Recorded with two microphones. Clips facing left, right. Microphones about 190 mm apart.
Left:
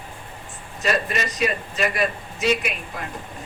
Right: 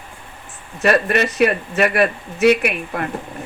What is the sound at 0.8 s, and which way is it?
Speech, 65° right (ahead or behind).